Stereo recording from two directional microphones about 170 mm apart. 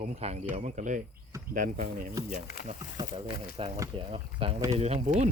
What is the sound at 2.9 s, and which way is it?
Speech, 30° right (ahead or behind).